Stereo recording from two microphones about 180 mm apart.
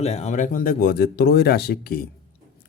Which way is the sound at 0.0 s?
35° left (ahead or behind).